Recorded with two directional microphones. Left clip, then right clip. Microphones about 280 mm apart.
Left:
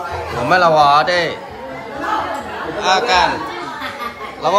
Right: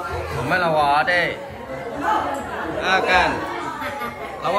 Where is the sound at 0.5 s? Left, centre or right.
Centre.